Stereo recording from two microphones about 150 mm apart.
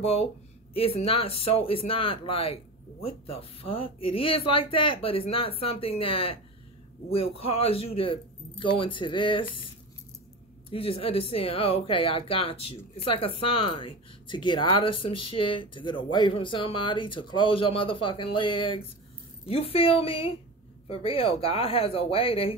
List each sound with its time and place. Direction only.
0.7 s speech: 40° left (ahead or behind)
10.7 s speech: 40° left (ahead or behind)